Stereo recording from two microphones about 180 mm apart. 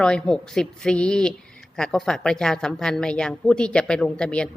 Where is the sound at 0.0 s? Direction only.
5° left (ahead or behind).